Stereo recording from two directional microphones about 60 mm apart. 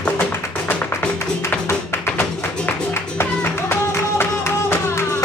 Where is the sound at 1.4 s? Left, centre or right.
Left.